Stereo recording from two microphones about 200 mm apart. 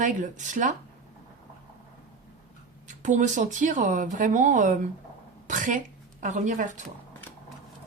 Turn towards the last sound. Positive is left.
turn(degrees=-40)  # may be behind; listen again after turning